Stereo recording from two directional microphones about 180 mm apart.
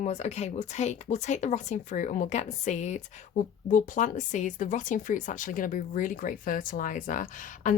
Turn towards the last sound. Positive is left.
turn(degrees=45)  # may be behind; listen again after turning